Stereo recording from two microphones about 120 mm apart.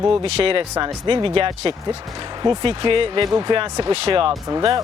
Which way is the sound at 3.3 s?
30° right (ahead or behind).